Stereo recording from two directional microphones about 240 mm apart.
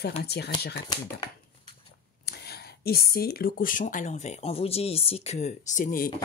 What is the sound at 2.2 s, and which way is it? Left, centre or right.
Speech, left.